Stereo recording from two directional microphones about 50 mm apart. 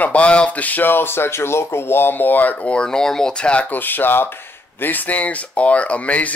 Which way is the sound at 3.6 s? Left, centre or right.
Left.